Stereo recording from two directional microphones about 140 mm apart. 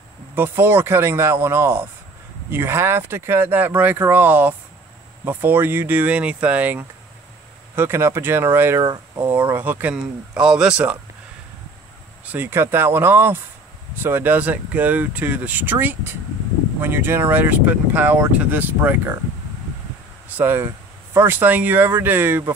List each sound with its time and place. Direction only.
0.4 s speech: 15° right (ahead or behind)
12.3 s speech: 15° right (ahead or behind)
20.2 s speech: 15° right (ahead or behind)